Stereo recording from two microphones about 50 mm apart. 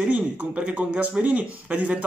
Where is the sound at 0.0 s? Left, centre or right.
Right.